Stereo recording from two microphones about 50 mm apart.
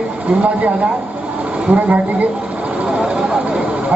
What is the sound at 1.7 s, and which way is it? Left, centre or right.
Speech, right.